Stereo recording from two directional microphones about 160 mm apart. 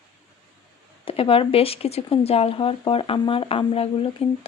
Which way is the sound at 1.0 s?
35° left (ahead or behind).